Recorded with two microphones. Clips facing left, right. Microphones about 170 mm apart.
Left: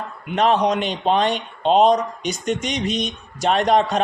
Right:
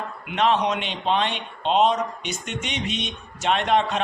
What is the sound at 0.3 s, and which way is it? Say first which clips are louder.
Speech: left 4 dB; 40° left (ahead or behind).